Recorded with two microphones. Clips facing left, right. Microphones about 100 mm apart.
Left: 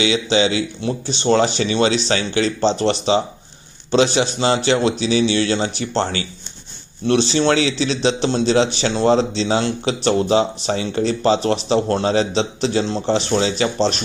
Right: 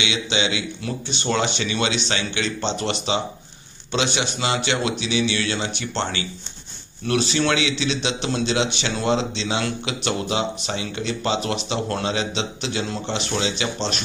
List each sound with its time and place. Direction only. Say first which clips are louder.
0.0 s a man's voice: left 7 dB; 35° left (ahead or behind)